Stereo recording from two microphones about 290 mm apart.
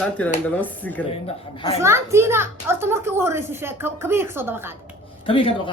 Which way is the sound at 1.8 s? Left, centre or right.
Centre.